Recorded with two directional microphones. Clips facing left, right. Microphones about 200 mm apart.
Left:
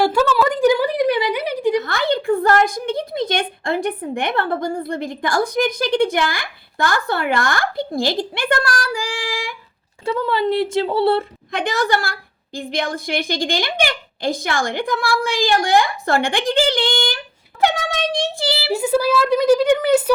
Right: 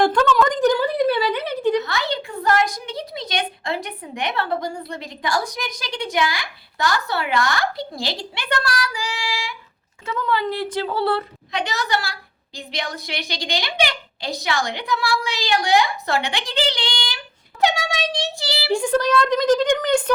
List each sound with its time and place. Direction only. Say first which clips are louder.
0.0 s a sound: left 1 dB; 10° left (ahead or behind)
1.8 s a woman's voice: left 5 dB; 50° left (ahead or behind)
10.1 s speech: left 4 dB; 30° left (ahead or behind)
11.5 s a woman's voice: left 4 dB; 50° left (ahead or behind)
18.7 s a woman's voice: left 1 dB; 5° left (ahead or behind)